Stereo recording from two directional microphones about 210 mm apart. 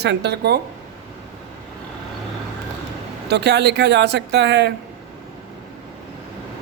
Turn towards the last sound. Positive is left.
turn(degrees=-55)  # may be behind; listen again after turning